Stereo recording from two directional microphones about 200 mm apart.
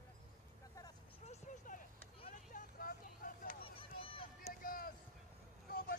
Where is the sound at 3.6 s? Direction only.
25° left (ahead or behind).